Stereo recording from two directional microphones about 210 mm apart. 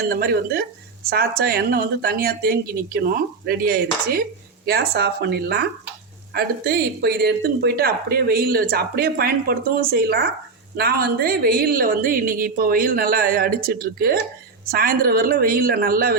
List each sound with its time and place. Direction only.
0.1 s speech: 45° right (ahead or behind)